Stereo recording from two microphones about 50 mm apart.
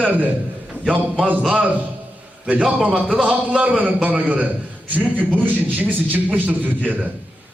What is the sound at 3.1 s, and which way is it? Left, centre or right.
A man's voice, right.